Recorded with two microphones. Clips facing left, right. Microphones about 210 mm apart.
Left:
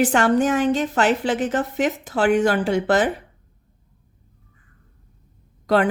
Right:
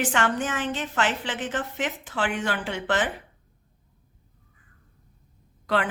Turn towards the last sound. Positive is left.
turn(degrees=40)  # may be behind; listen again after turning